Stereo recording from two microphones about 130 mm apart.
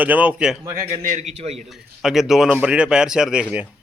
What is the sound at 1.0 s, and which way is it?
Speech, 80° right.